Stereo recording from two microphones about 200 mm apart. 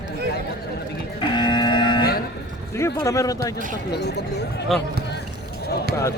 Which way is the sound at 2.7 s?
15° left (ahead or behind).